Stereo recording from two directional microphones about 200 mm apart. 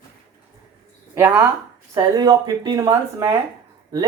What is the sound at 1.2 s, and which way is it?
Speech, 10° right (ahead or behind).